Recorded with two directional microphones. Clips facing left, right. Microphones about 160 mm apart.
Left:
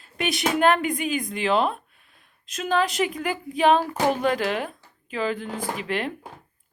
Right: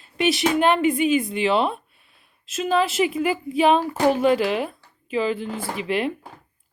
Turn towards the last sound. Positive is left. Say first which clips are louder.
# right 3 dB
turn(degrees=-5)  # may be behind; listen again after turning